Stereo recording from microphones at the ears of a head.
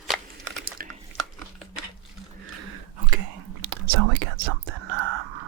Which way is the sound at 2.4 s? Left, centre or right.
Right.